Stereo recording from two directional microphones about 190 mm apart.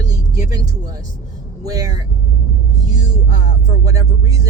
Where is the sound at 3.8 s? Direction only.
20° right (ahead or behind).